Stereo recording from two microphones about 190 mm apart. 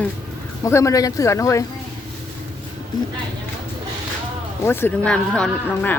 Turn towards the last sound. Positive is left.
turn(degrees=5)  # may be behind; listen again after turning